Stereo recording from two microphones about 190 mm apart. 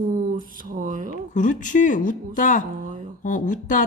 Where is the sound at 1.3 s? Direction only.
40° left (ahead or behind).